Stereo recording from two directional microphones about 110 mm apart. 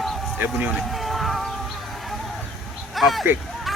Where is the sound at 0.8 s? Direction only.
Centre (ahead or behind).